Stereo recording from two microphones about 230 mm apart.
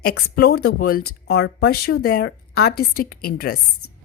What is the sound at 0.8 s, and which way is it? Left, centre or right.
A woman's voice, left.